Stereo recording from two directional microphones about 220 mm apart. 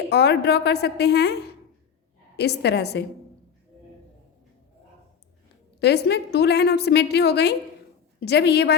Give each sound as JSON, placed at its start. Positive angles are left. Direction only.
{"t": 0.1, "sound": "a woman's voice", "side_deg": 50}
{"t": 2.3, "sound": "a woman's voice", "side_deg": 50}
{"t": 5.8, "sound": "a woman's voice", "side_deg": 50}